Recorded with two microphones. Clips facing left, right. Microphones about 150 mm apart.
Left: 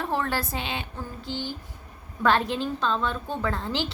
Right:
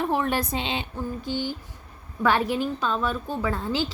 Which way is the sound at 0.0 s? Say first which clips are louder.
Right 3 dB; 15° right (ahead or behind).